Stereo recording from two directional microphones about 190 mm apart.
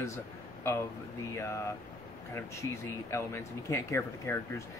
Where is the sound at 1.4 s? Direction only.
15° left (ahead or behind).